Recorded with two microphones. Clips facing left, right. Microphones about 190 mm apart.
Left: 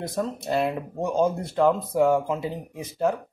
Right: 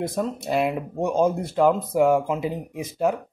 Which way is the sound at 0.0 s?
10° right (ahead or behind).